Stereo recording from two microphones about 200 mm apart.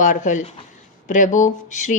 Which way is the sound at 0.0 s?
40° left (ahead or behind).